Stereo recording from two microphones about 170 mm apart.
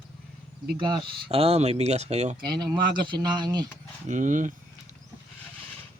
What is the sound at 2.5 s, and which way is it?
Speech, 25° right (ahead or behind).